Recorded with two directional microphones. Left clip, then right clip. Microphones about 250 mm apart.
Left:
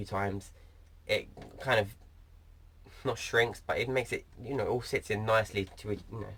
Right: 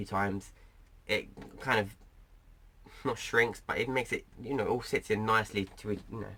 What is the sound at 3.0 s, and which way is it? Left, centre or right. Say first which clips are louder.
Speech: even; centre.